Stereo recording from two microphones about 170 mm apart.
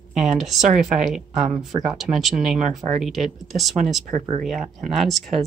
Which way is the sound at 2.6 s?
45° right (ahead or behind).